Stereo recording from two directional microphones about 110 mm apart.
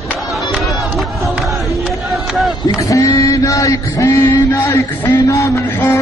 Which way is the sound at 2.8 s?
30° left (ahead or behind).